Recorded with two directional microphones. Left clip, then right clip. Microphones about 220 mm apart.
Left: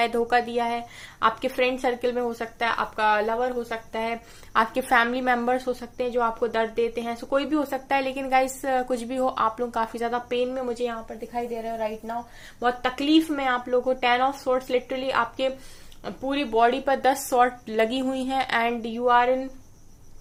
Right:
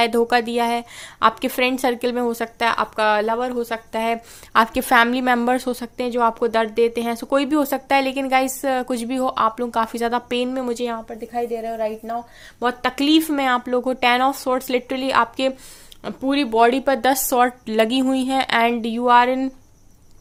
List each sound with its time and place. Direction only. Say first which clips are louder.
0.0 s a woman's voice: right 5 dB; 45° right (ahead or behind)